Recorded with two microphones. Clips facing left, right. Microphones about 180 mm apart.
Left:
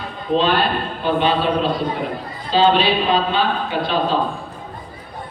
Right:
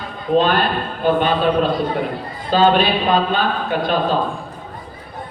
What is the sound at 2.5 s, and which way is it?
A man's voice, 50° right (ahead or behind).